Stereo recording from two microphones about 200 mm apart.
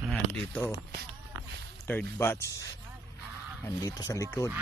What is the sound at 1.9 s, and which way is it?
Speech, 10° left (ahead or behind).